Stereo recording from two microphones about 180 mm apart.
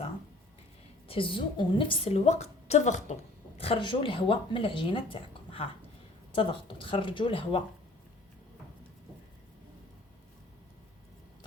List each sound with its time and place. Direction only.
1.0 s a woman's voice: 30° left (ahead or behind)
3.6 s speech: 30° left (ahead or behind)